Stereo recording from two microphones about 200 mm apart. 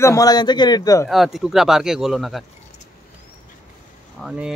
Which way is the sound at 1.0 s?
Centre (ahead or behind).